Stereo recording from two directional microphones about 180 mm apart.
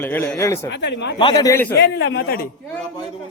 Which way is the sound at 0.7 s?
75° left (ahead or behind).